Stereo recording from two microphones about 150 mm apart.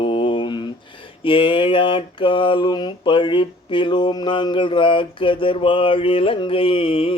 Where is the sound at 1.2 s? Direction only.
35° left (ahead or behind).